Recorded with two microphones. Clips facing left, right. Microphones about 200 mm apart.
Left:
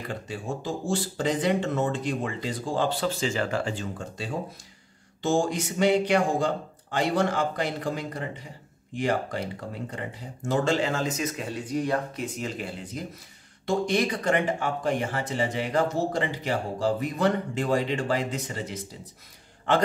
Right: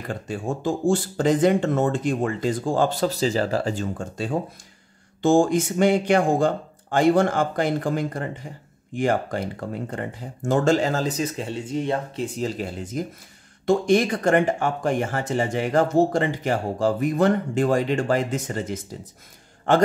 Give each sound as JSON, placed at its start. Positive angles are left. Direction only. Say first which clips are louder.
{"t": 0.1, "sound": "speech", "louder": "right 6 dB", "side_deg": -50}